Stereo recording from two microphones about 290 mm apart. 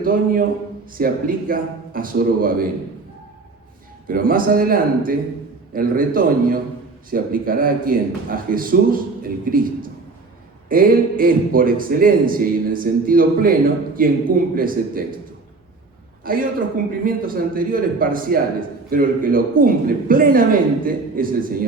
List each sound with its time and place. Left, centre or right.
0.0 s a man's voice: right
4.1 s a man's voice: right
10.7 s a man's voice: right
16.2 s a man's voice: right